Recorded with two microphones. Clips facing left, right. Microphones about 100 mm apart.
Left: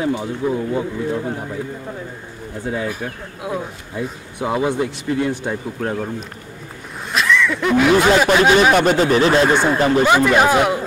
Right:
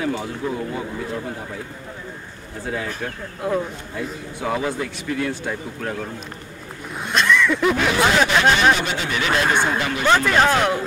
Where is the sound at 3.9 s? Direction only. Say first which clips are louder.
Left 4 dB; 20° left (ahead or behind).